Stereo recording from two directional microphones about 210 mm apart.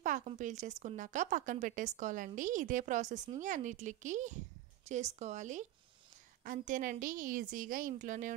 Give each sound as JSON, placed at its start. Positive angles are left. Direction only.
{"t": 0.0, "sound": "a woman's voice", "side_deg": -35}